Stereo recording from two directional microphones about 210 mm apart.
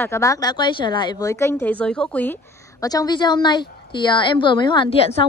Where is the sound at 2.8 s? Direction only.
15° left (ahead or behind).